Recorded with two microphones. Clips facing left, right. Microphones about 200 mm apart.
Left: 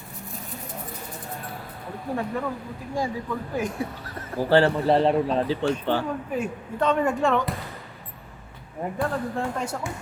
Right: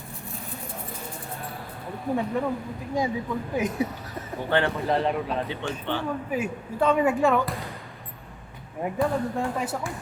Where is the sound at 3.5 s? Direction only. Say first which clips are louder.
Right 3 dB; 20° right (ahead or behind).